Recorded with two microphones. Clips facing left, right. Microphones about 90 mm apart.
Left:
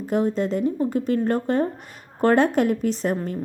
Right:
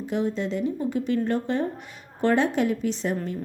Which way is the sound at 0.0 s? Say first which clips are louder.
Left 4 dB; 45° left (ahead or behind).